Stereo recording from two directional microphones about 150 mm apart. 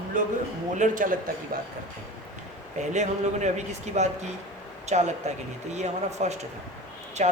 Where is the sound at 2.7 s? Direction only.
50° right (ahead or behind).